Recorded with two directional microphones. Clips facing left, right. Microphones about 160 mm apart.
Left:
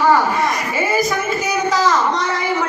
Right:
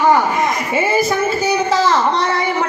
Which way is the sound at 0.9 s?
30° right (ahead or behind).